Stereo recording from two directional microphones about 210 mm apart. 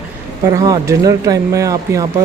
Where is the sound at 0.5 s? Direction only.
15° right (ahead or behind).